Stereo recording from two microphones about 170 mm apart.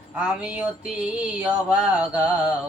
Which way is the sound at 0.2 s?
5° right (ahead or behind).